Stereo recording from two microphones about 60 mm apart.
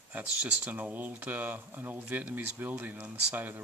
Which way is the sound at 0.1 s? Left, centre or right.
Right.